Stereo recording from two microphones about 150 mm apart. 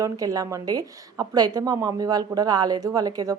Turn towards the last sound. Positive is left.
turn(degrees=-25)  # may be behind; listen again after turning